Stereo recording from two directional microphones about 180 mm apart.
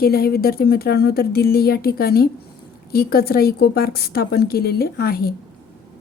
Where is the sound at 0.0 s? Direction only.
55° left (ahead or behind).